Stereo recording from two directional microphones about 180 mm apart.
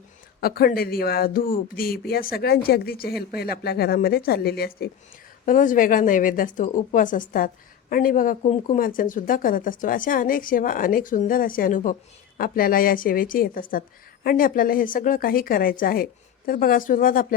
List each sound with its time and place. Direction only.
0.3 s speech: 60° left (ahead or behind)
5.5 s speech: 45° left (ahead or behind)